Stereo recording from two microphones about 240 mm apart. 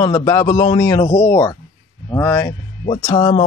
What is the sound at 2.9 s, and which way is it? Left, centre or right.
Speech, left.